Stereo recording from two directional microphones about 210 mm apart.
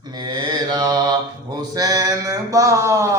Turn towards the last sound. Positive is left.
turn(degrees=-15)  # may be behind; listen again after turning